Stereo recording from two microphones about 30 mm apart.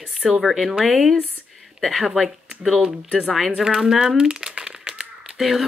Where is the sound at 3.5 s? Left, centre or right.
Right.